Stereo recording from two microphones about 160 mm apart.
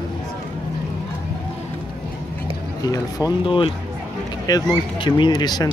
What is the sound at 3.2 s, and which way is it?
Speech, 20° left (ahead or behind).